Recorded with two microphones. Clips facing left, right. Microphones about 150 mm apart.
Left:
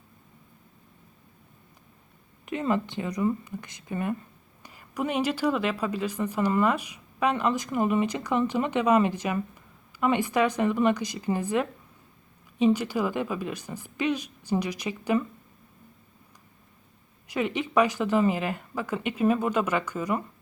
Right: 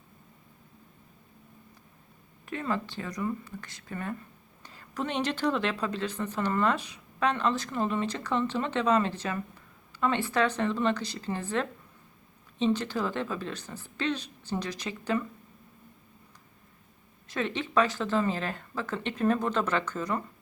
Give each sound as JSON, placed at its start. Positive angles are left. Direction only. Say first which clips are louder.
{"t": 2.5, "sound": "a woman's voice", "louder": "left 5 dB", "side_deg": 15}
{"t": 17.2, "sound": "a woman's voice", "louder": "left 3 dB", "side_deg": 10}